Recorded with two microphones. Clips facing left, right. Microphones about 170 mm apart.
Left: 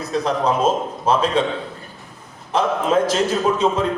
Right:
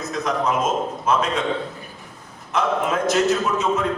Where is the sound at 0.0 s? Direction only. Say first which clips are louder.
Left 3 dB; 30° left (ahead or behind).